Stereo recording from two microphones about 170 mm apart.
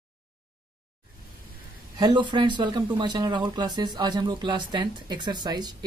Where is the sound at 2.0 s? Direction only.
25° right (ahead or behind).